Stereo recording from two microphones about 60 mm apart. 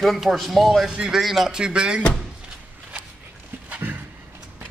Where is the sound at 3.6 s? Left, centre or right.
Right.